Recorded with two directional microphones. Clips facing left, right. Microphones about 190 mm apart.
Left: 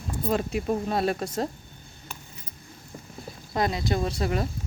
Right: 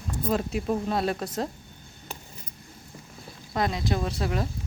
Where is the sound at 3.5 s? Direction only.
Centre (ahead or behind).